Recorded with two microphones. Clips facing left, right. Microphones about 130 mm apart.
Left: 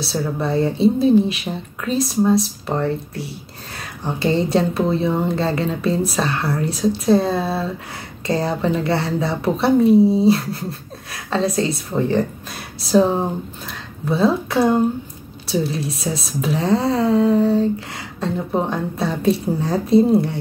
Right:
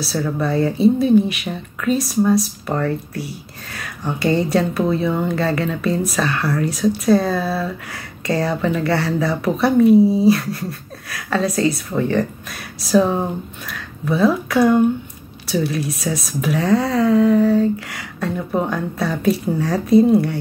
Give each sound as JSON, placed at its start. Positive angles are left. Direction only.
{"t": 0.0, "sound": "speech", "side_deg": 25}